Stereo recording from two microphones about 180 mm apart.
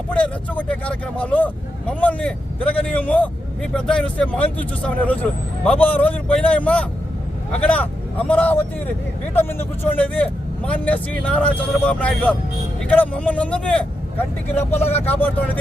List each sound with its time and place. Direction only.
0.1 s a man's voice: 5° left (ahead or behind)